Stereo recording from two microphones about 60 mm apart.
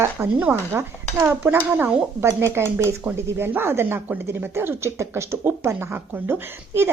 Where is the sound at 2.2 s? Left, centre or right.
Right.